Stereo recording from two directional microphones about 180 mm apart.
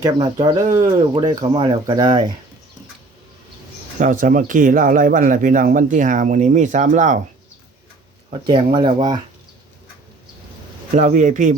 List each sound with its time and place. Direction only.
0.4 s speech: 20° right (ahead or behind)
3.9 s speech: 45° right (ahead or behind)
8.3 s speech: 25° right (ahead or behind)
10.9 s speech: 45° right (ahead or behind)